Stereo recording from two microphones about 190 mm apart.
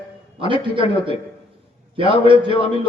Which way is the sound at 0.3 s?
25° right (ahead or behind).